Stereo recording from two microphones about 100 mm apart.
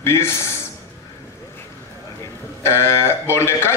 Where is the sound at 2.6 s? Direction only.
25° left (ahead or behind).